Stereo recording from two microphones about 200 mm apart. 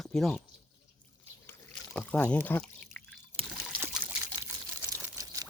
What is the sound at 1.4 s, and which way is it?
Rowboat, 10° left (ahead or behind).